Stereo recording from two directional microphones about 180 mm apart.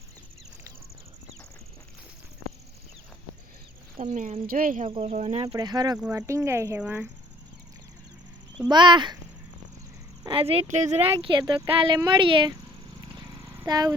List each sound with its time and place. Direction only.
3.9 s speech: 45° right (ahead or behind)
4.9 s speech: 30° right (ahead or behind); by 7.1 s 10° right (ahead or behind)
8.7 s speech: 25° right (ahead or behind)
10.2 s speech: 30° right (ahead or behind)
13.7 s speech: 20° right (ahead or behind)